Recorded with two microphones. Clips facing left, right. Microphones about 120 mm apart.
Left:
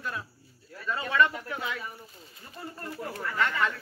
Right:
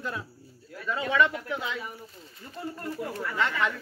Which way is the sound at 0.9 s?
15° right (ahead or behind).